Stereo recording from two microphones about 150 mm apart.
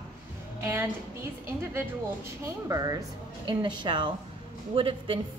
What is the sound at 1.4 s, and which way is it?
A woman's voice, 15° right (ahead or behind).